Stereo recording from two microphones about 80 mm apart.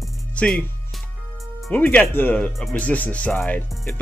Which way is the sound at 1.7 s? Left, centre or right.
Centre.